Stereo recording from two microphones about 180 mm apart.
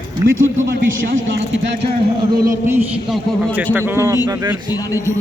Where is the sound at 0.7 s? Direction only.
55° right (ahead or behind).